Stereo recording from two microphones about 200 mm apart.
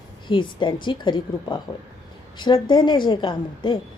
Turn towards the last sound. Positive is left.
turn(degrees=25)  # may be behind; listen again after turning